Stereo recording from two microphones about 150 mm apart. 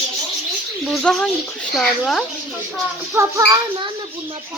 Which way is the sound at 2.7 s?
20° right (ahead or behind).